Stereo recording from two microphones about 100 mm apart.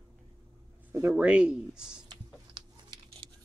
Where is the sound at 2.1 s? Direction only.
45° right (ahead or behind).